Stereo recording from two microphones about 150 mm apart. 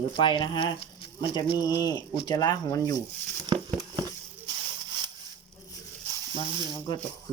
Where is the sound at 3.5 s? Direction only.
30° right (ahead or behind).